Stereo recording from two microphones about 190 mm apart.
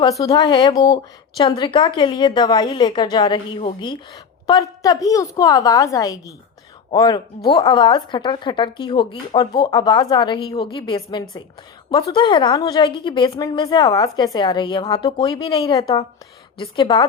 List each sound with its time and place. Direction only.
0.0 s a woman's voice: 20° left (ahead or behind)